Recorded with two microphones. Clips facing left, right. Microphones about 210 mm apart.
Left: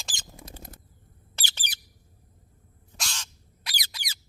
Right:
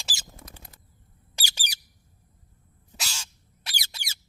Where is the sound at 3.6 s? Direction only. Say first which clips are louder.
Left 1 dB; 30° right (ahead or behind).